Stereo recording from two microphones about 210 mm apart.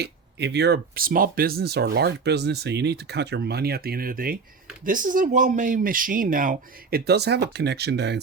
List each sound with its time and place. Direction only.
0.0 s speech: 55° right (ahead or behind)